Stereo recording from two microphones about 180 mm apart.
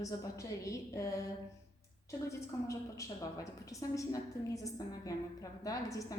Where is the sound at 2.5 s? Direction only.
20° left (ahead or behind).